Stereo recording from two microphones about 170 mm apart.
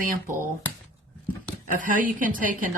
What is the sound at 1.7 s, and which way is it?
Speech, 50° right (ahead or behind).